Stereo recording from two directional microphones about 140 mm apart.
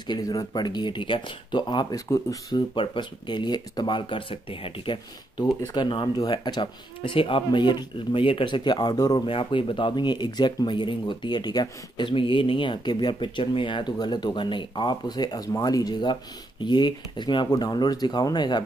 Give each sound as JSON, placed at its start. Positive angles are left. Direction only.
{"t": 0.0, "sound": "speech", "side_deg": 30}
{"t": 2.7, "sound": "speech", "side_deg": 35}
{"t": 9.2, "sound": "speech", "side_deg": 40}